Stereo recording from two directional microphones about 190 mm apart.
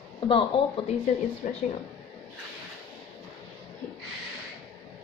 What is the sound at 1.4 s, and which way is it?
Speech, 45° left (ahead or behind).